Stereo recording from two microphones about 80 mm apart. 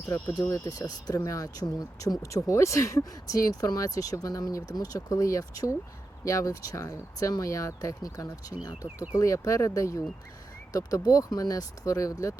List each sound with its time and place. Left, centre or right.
0.5 s speech: left
1.1 s speech: left